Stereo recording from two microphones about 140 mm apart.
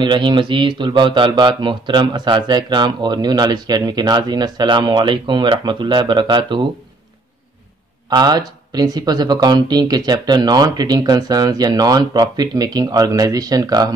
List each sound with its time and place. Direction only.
0.0 s speech: 35° right (ahead or behind)
8.1 s speech: 30° right (ahead or behind)